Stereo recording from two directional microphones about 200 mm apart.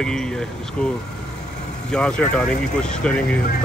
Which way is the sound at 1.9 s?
5° left (ahead or behind).